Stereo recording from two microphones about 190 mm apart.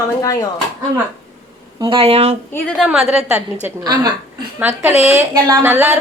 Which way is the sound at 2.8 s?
5° right (ahead or behind).